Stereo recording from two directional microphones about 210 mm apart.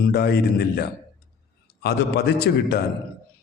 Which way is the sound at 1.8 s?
50° left (ahead or behind).